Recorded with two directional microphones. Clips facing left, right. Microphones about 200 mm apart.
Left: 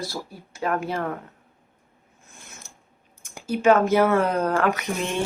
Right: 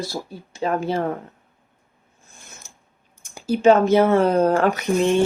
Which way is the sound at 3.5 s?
25° right (ahead or behind).